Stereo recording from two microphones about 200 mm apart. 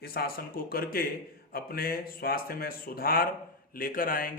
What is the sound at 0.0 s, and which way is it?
Speech, 50° left (ahead or behind).